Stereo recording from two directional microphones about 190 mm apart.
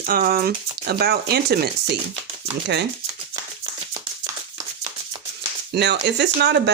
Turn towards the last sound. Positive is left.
turn(degrees=-65)  # may be behind; listen again after turning